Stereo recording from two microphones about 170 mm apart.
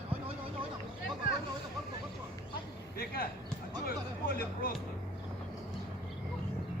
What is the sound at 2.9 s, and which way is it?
Speech, 60° left (ahead or behind).